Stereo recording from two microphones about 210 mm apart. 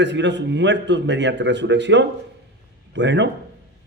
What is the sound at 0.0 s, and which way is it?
Speech, 55° right (ahead or behind).